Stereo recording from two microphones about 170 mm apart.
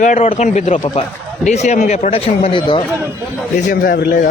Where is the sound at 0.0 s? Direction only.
40° left (ahead or behind).